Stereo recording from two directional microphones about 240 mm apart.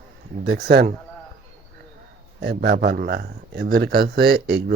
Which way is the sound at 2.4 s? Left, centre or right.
Right.